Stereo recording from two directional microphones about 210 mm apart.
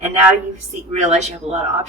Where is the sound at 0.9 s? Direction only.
30° right (ahead or behind).